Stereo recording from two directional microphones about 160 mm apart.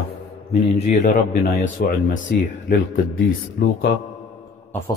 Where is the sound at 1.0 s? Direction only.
70° left (ahead or behind).